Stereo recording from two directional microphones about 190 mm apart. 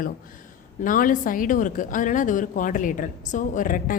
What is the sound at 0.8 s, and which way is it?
A woman's voice, 45° left (ahead or behind).